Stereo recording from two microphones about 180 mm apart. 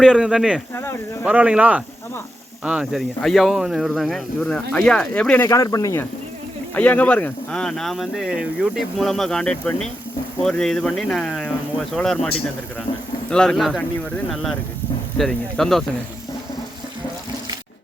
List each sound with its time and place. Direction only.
0.0 s speech: 5° right (ahead or behind)
0.7 s speech: 10° left (ahead or behind)
1.2 s speech: 5° right (ahead or behind)
5.5 s speech: 20° left (ahead or behind); by 13.8 s centre (ahead or behind)
15.2 s speech: centre (ahead or behind)